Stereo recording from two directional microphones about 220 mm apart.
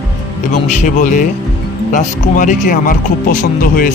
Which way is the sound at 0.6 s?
35° left (ahead or behind).